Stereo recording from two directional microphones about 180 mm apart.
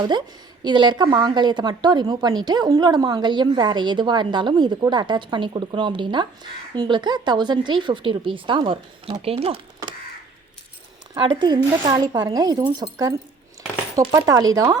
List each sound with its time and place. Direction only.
0.0 s a woman's voice: 25° right (ahead or behind)
11.3 s a woman's voice: 25° right (ahead or behind)